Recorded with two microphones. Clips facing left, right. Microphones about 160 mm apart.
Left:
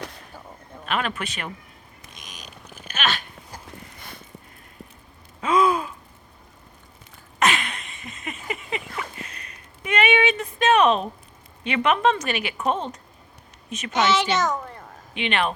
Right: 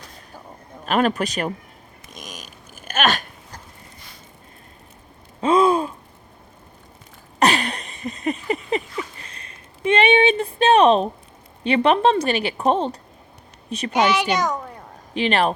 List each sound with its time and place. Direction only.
0.9 s speech: 40° right (ahead or behind)
2.1 s a sound: 45° right (ahead or behind)
5.4 s gasp: 30° right (ahead or behind)
7.3 s a sound: 35° right (ahead or behind)
11.6 s a woman's voice: 35° right (ahead or behind)
14.3 s a child's voice: 10° right (ahead or behind)
15.1 s speech: 35° right (ahead or behind)